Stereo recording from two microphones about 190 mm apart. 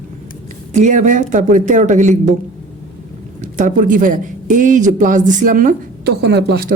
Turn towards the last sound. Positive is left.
turn(degrees=-55)  # may be behind; listen again after turning